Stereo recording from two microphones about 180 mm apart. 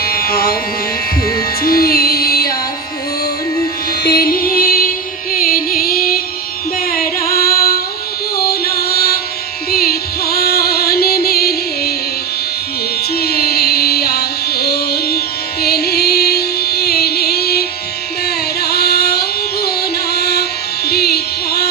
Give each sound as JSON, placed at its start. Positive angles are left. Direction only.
{"t": 0.0, "sound": "music", "side_deg": 55}
{"t": 1.6, "sound": "music", "side_deg": 55}
{"t": 4.0, "sound": "music", "side_deg": 55}
{"t": 8.4, "sound": "chant", "side_deg": 60}
{"t": 9.7, "sound": "music", "side_deg": 60}
{"t": 13.1, "sound": "music", "side_deg": 60}
{"t": 18.3, "sound": "carnatic music", "side_deg": 60}